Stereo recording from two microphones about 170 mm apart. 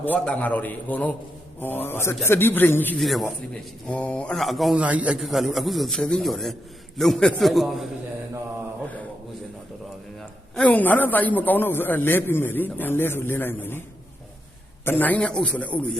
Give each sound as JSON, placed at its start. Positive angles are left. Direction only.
{"t": 0.0, "sound": "a man's voice", "side_deg": 10}
{"t": 3.0, "sound": "a man's voice", "side_deg": 0}
{"t": 8.8, "sound": "a sound", "side_deg": 10}
{"t": 10.2, "sound": "a man's voice", "side_deg": 5}
{"t": 14.8, "sound": "a man's voice", "side_deg": 10}